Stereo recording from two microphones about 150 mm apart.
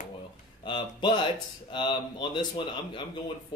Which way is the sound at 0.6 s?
30° left (ahead or behind).